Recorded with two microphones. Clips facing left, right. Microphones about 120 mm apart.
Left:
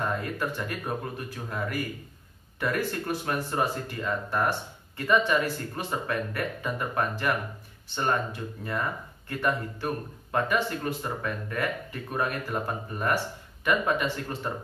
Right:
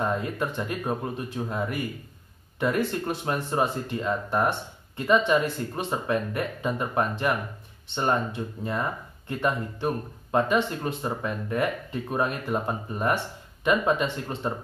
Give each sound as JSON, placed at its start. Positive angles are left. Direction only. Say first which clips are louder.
{"t": 0.0, "sound": "speech", "louder": "right 3 dB", "side_deg": -20}